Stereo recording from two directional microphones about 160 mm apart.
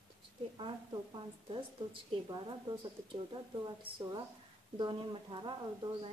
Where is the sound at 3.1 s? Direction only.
30° right (ahead or behind).